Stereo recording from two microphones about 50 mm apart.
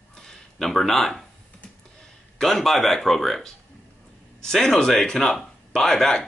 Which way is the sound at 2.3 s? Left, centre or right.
Centre.